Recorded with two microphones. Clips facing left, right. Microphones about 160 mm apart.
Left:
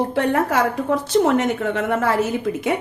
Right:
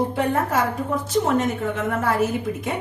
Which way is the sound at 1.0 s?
75° left (ahead or behind).